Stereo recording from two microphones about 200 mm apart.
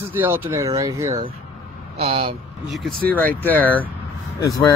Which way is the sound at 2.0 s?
30° right (ahead or behind).